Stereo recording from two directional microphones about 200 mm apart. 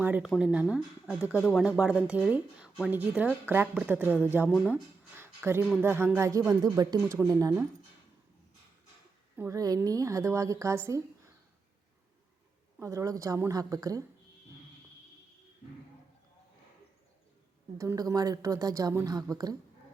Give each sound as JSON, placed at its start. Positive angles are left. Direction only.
{"t": 0.0, "sound": "speech", "side_deg": -10}
{"t": 1.4, "sound": "speech", "side_deg": 5}
{"t": 1.6, "sound": "speech", "side_deg": -5}
{"t": 4.4, "sound": "speech", "side_deg": 0}
{"t": 5.1, "sound": "speech", "side_deg": -10}
{"t": 9.4, "sound": "speech", "side_deg": -15}
{"t": 12.8, "sound": "speech", "side_deg": -15}
{"t": 17.7, "sound": "speech", "side_deg": -15}